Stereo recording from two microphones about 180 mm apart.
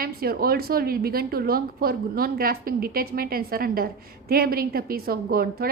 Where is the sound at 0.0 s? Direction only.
55° right (ahead or behind).